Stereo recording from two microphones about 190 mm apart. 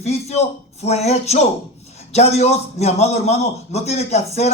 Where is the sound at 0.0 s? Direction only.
35° left (ahead or behind).